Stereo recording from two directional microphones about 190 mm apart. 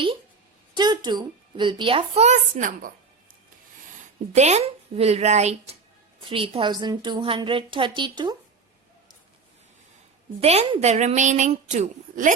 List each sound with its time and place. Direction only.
0.7 s speech: 20° right (ahead or behind); by 2.9 s 45° right (ahead or behind)
4.4 s a woman's voice: 35° right (ahead or behind)
10.4 s a woman's voice: 30° right (ahead or behind)